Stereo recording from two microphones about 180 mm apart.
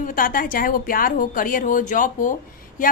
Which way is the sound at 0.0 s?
50° left (ahead or behind).